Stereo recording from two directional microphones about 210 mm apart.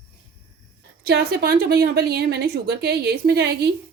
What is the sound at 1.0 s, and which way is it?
A woman's voice, 50° right (ahead or behind).